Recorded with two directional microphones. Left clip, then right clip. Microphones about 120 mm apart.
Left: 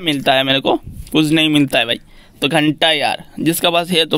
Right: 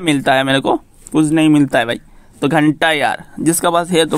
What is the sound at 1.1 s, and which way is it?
Speech, 25° left (ahead or behind).